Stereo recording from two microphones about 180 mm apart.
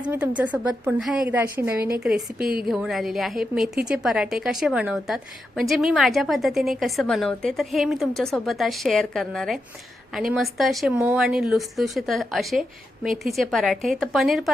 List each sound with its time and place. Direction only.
0.0 s a woman's voice: 5° right (ahead or behind)